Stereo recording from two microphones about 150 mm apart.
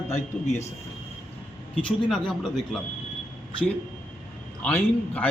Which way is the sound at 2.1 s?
Centre (ahead or behind).